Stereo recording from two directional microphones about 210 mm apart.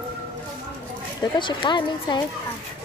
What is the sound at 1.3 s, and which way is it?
Speech, 20° left (ahead or behind).